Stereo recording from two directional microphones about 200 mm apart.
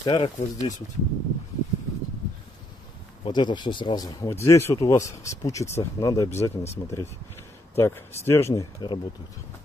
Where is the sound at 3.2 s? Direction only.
20° left (ahead or behind).